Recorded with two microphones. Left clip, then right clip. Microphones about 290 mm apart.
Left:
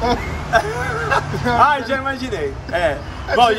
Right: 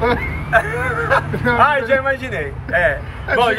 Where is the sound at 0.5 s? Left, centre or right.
Centre.